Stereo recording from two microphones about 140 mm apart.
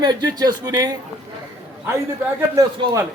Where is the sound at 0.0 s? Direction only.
30° right (ahead or behind).